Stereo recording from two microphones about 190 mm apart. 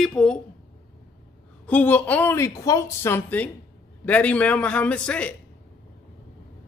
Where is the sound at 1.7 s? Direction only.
10° left (ahead or behind).